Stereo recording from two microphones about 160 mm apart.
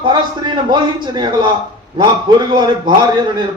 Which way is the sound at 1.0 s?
30° right (ahead or behind).